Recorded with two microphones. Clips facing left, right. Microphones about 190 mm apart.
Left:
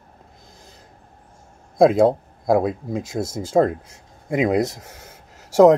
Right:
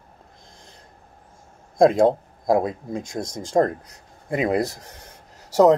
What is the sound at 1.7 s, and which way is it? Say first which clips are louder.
Speech: left 1 dB; 5° left (ahead or behind).